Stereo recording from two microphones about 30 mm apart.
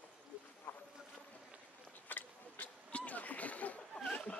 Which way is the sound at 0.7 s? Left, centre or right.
Left.